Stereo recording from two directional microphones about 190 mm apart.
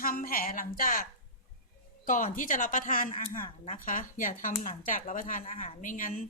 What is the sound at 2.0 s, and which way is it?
Speech, 45° left (ahead or behind).